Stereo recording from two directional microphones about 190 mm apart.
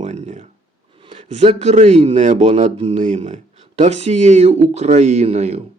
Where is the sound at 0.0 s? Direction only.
35° right (ahead or behind).